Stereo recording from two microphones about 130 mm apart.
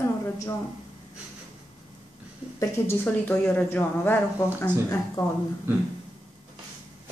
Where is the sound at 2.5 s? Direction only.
20° left (ahead or behind).